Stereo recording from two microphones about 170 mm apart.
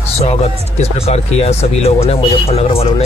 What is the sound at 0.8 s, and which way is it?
Speech, 40° left (ahead or behind).